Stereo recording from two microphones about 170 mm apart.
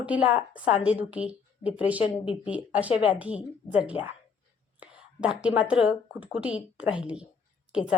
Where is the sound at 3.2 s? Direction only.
10° right (ahead or behind).